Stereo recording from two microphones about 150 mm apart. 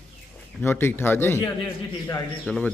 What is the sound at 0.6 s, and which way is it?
A man's voice, 15° left (ahead or behind).